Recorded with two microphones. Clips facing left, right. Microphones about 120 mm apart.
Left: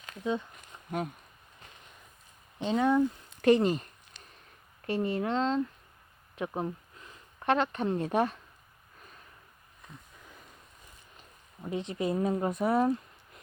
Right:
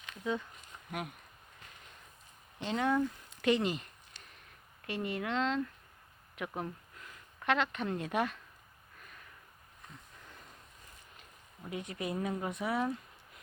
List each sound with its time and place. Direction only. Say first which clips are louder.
2.6 s speech: left 5 dB; 15° left (ahead or behind)
3.4 s speech: left 7 dB; 40° left (ahead or behind)
4.9 s speech: left 6 dB; 35° left (ahead or behind)
11.7 s speech: left 7 dB; 30° left (ahead or behind); by 12.9 s 45° left (ahead or behind)